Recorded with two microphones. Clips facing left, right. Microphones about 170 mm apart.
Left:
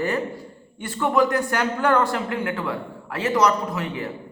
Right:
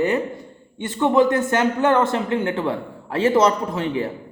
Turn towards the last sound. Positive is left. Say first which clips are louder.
# right 5 dB
turn(degrees=-30)  # may be behind; listen again after turning